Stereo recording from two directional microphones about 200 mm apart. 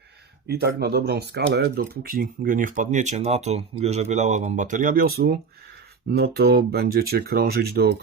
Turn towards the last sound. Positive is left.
turn(degrees=-50)  # may be behind; listen again after turning